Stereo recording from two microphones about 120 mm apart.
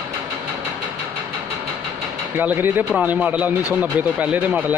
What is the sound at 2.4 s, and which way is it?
Speech, 15° right (ahead or behind).